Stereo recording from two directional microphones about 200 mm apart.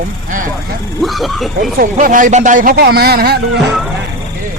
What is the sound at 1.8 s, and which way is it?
Speech, 45° right (ahead or behind).